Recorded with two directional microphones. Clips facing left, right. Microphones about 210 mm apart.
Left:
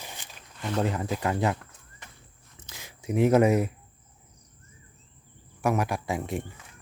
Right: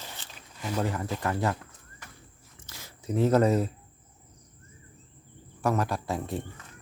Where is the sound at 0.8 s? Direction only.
15° left (ahead or behind).